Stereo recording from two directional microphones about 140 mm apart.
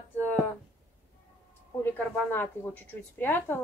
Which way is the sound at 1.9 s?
15° left (ahead or behind).